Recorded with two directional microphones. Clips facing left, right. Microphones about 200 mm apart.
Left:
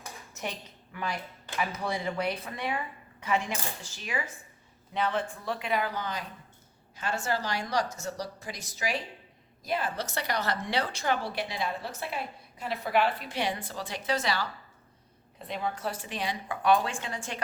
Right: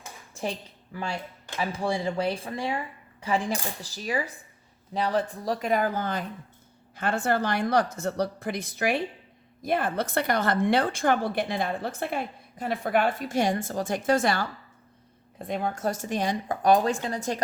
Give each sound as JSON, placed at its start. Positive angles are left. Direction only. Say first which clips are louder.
{"t": 0.0, "sound": "dishes", "louder": "right 5 dB", "side_deg": -30}
{"t": 0.9, "sound": "a woman's voice", "louder": "right 2 dB", "side_deg": -30}